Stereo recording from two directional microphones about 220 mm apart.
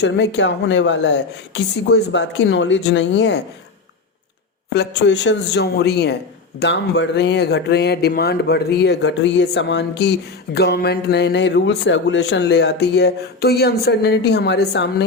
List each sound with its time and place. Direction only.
0.0 s speech: 55° left (ahead or behind)
4.7 s speech: 50° left (ahead or behind)